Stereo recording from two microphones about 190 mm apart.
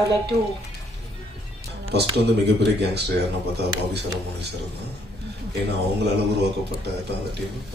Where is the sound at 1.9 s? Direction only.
60° right (ahead or behind).